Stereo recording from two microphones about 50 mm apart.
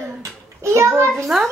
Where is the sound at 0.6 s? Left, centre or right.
Right.